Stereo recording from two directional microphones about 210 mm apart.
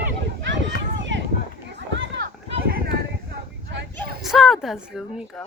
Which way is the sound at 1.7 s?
55° right (ahead or behind).